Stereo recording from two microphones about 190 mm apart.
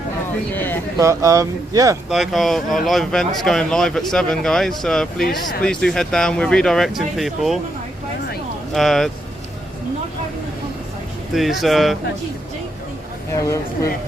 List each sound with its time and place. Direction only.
0.5 s speech: 10° left (ahead or behind)
0.9 s speech: 15° right (ahead or behind)
2.0 s speech: centre (ahead or behind)
8.7 s speech: centre (ahead or behind)
11.3 s speech: centre (ahead or behind)